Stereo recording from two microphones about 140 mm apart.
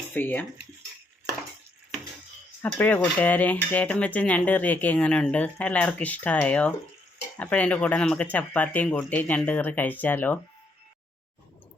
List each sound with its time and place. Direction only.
0.1 s speech: 15° left (ahead or behind)
2.6 s speech: 15° left (ahead or behind)